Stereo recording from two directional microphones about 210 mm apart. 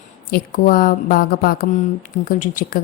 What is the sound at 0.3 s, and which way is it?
A woman's voice, 40° left (ahead or behind).